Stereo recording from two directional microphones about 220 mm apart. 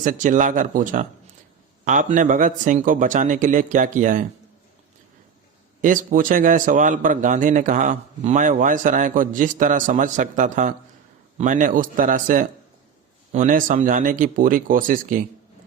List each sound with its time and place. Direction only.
0.0 s a man's voice: 35° right (ahead or behind)
5.8 s a man's voice: 35° right (ahead or behind)